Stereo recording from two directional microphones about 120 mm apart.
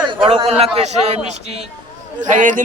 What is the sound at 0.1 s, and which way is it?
Chatter, 45° right (ahead or behind).